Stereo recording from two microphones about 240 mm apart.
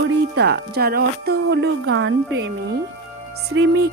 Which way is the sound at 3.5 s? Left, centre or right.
Right.